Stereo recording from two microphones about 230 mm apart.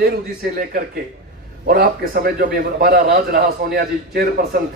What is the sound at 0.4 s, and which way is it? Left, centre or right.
A man's voice, right.